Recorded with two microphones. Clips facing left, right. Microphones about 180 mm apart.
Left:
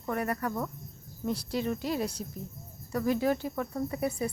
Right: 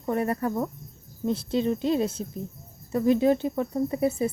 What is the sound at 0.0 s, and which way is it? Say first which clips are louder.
Speech: right 5 dB; 25° right (ahead or behind).